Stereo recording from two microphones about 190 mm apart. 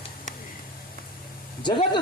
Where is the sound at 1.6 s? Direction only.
25° left (ahead or behind).